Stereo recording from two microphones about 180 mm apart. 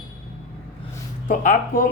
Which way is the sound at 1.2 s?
45° left (ahead or behind).